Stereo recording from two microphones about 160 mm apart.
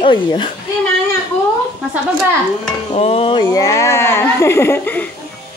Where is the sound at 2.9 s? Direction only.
40° left (ahead or behind).